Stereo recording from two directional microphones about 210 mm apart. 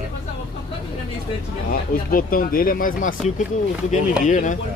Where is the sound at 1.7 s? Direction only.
40° left (ahead or behind).